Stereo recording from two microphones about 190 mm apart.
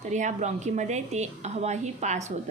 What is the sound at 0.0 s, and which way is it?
A woman's voice, 40° right (ahead or behind).